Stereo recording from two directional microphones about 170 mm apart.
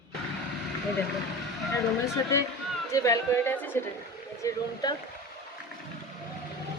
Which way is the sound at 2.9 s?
20° left (ahead or behind).